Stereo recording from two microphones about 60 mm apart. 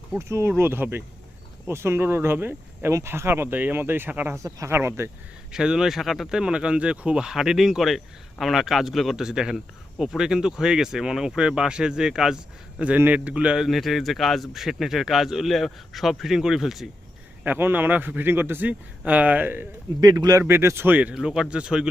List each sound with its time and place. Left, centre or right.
0.2 s speech: right
0.5 s speech: right
4.4 s speech: right
4.7 s speech: right
5.5 s speech: centre
13.1 s speech: right
13.6 s speech: centre
17.4 s speech: right
18.7 s speech: right
20.0 s speech: right
20.4 s speech: right
21.1 s speech: centre